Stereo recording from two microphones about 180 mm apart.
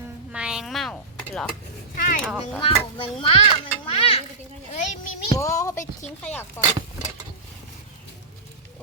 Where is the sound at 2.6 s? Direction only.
30° left (ahead or behind).